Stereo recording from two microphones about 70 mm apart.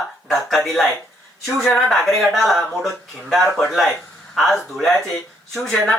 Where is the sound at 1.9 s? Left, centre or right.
Centre.